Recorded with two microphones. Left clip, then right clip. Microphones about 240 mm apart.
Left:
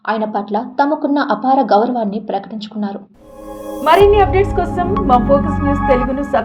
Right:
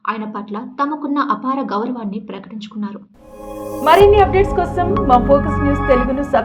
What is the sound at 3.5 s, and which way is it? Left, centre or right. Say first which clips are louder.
Speech: even; centre.